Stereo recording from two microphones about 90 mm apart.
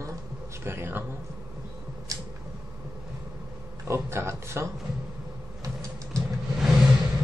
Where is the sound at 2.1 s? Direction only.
40° right (ahead or behind).